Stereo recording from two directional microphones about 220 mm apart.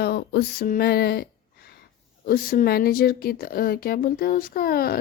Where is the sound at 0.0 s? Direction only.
45° left (ahead or behind).